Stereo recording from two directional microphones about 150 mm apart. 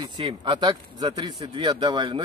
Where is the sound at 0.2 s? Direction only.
35° right (ahead or behind).